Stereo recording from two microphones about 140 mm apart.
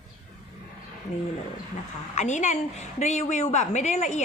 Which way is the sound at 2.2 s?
60° left (ahead or behind).